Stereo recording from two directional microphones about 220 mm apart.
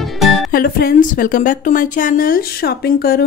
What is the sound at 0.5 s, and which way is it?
A woman's voice, 40° left (ahead or behind).